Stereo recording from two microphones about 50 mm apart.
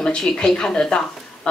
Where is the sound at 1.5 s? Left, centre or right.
Left.